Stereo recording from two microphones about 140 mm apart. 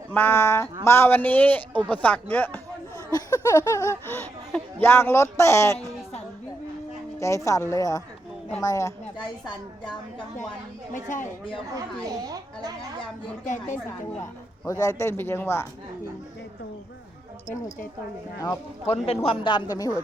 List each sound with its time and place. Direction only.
0.1 s a man's voice: 15° left (ahead or behind)
3.1 s speech: 30° left (ahead or behind)
7.2 s speech: 20° left (ahead or behind)
9.1 s a woman's voice: 35° left (ahead or behind)
10.9 s speech: 65° left (ahead or behind)
13.4 s speech: 65° left (ahead or behind)
14.7 s speech: 20° left (ahead or behind)
19.0 s a woman's voice: 45° left (ahead or behind); by 19.9 s 25° left (ahead or behind)